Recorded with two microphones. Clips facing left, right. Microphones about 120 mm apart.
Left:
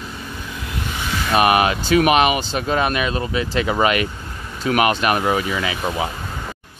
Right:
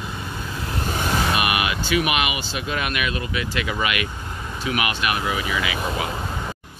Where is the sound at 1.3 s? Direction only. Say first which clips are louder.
Left 7 dB; 35° left (ahead or behind).